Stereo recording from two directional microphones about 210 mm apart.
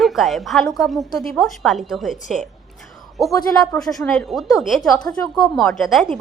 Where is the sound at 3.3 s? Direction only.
15° left (ahead or behind).